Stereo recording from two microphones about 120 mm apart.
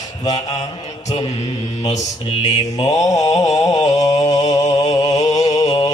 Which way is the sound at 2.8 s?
30° left (ahead or behind).